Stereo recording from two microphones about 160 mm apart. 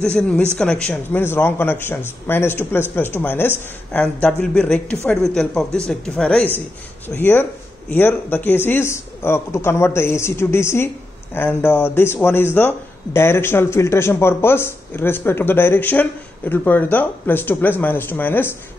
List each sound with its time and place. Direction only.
0.0 s a man's voice: 5° left (ahead or behind)